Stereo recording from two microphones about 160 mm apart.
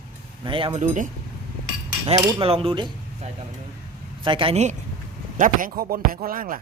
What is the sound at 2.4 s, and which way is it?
Speech, 35° right (ahead or behind).